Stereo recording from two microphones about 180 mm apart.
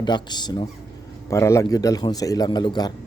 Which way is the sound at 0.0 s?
25° left (ahead or behind).